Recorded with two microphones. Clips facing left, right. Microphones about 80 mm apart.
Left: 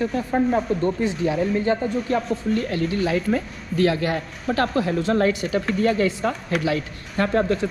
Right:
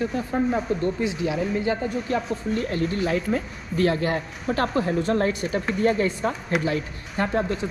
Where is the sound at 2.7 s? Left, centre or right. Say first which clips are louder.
Left 2 dB; left.